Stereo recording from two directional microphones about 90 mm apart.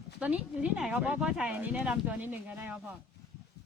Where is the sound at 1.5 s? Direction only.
20° right (ahead or behind).